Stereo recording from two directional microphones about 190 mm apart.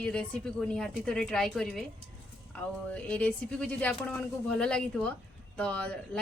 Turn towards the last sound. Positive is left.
turn(degrees=5)  # may be behind; listen again after turning